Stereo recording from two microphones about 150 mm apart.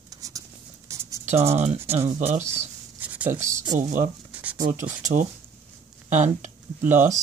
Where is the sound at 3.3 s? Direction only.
60° right (ahead or behind).